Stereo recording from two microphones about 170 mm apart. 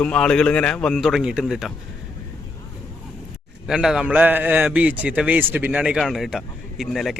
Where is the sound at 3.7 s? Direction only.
5° right (ahead or behind).